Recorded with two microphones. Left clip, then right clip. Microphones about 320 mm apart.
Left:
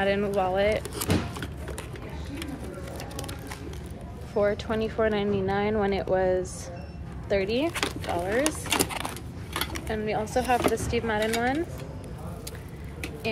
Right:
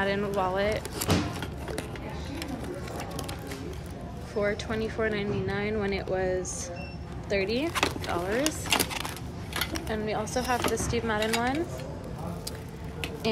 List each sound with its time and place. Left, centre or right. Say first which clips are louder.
0.0 s speech: left 3 dB; centre
4.4 s speech: left 4 dB; centre
8.7 s a sound: right 1 dB; centre
9.8 s speech: left 4 dB; centre